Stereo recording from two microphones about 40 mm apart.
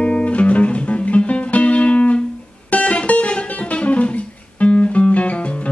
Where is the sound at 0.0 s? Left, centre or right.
Left.